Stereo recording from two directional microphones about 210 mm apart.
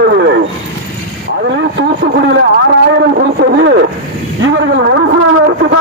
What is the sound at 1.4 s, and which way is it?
Vehicle, 55° right (ahead or behind).